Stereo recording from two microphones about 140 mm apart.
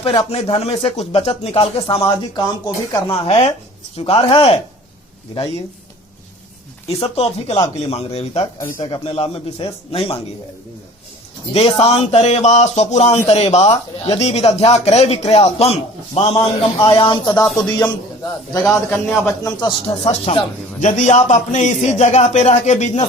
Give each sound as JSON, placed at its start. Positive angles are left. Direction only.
{"t": 0.0, "sound": "speech", "side_deg": 40}
{"t": 2.0, "sound": "speech", "side_deg": 30}
{"t": 3.9, "sound": "speech", "side_deg": 45}
{"t": 6.8, "sound": "speech", "side_deg": 45}
{"t": 11.5, "sound": "speech", "side_deg": 45}
{"t": 16.2, "sound": "a man's voice", "side_deg": 30}
{"t": 17.4, "sound": "a man's voice", "side_deg": 5}
{"t": 19.2, "sound": "speech", "side_deg": 30}
{"t": 20.3, "sound": "a man's voice", "side_deg": 60}